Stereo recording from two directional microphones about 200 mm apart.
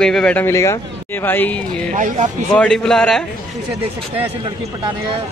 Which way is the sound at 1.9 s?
40° right (ahead or behind).